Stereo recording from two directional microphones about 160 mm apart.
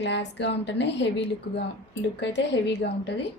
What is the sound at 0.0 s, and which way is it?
Speech, 90° left.